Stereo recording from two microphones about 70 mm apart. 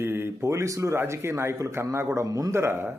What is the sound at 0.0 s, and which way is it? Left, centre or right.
Speech, right.